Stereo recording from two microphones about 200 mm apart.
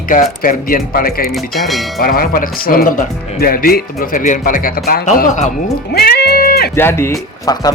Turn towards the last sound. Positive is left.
turn(degrees=20)  # may be behind; listen again after turning